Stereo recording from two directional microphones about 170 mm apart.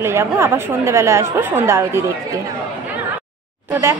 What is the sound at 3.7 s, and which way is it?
Speech, 15° right (ahead or behind).